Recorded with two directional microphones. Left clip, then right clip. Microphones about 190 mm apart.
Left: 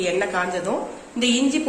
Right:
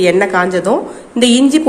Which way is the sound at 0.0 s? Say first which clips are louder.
Right 11 dB; 35° right (ahead or behind).